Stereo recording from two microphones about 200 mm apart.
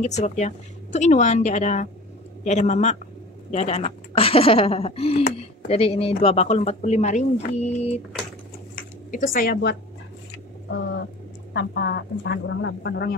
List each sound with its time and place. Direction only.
0.0 s speech: 35° left (ahead or behind)
9.1 s speech: 45° left (ahead or behind)
11.5 s speech: 60° left (ahead or behind)